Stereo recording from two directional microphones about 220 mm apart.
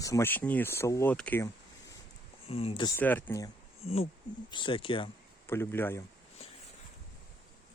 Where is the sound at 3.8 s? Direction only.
30° left (ahead or behind).